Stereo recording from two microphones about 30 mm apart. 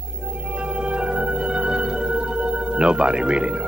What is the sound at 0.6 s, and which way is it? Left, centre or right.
Music, right.